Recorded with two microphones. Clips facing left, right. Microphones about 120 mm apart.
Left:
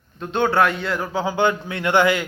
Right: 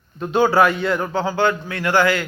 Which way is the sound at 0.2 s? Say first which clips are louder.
Right 3 dB; 5° right (ahead or behind).